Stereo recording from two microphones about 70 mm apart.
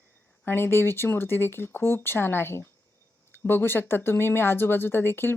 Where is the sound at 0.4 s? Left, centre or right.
Left.